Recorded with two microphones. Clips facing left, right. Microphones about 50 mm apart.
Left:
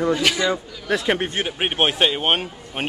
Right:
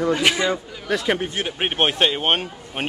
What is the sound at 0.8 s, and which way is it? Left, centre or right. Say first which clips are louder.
Speech: left 1 dB; centre.